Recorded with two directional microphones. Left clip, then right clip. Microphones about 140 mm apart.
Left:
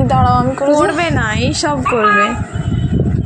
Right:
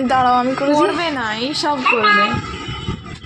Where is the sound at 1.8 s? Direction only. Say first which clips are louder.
Left 1 dB; centre (ahead or behind).